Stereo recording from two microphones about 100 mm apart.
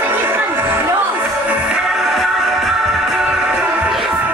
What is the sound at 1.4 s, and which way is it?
Music, 10° right (ahead or behind).